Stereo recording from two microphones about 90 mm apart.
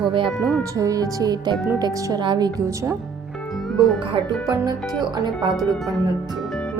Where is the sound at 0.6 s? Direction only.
40° right (ahead or behind).